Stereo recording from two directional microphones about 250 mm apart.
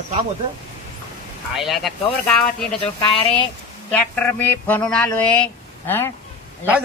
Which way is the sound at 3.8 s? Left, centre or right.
Centre.